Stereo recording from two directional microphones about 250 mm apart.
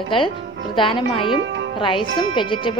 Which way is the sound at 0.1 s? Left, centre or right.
Centre.